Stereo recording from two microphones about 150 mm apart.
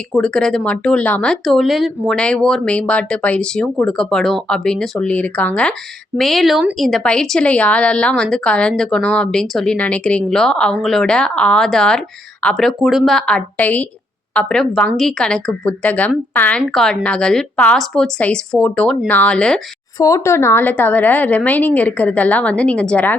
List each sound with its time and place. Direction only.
0.1 s a woman's voice: 5° left (ahead or behind)
20.0 s a woman's voice: 20° left (ahead or behind)